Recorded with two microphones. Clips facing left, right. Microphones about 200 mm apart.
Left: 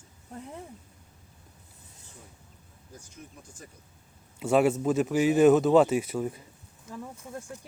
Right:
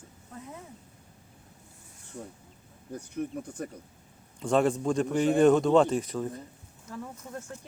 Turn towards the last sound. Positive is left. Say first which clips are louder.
# even
turn(degrees=15)  # may be behind; listen again after turning